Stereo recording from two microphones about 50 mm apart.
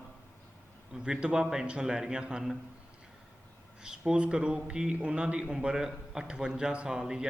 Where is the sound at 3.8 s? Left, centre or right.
Centre.